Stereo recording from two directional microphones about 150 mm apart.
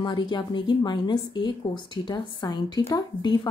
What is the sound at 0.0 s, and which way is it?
A woman's voice, 30° left (ahead or behind).